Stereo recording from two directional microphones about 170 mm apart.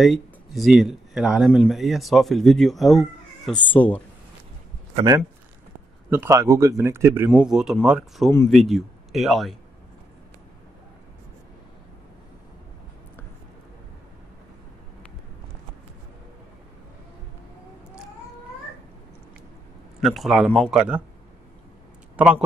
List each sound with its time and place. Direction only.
0.0 s speech: centre (ahead or behind)
6.0 s speech: 15° right (ahead or behind)
7.2 s speech: 5° right (ahead or behind)
20.0 s speech: centre (ahead or behind)
22.1 s a sound: 10° right (ahead or behind)